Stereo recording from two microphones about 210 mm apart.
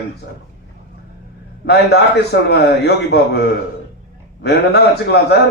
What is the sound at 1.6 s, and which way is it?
A man's voice, 50° left (ahead or behind).